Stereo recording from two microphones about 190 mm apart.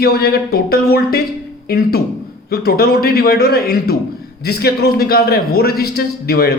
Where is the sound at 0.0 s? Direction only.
55° left (ahead or behind).